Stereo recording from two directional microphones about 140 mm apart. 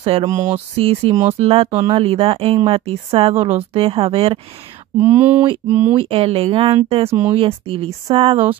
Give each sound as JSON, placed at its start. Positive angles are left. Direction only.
{"t": 0.2, "sound": "a sound", "side_deg": -20}
{"t": 0.7, "sound": "speech", "side_deg": -45}
{"t": 4.9, "sound": "speech", "side_deg": -15}
{"t": 5.9, "sound": "speech", "side_deg": -45}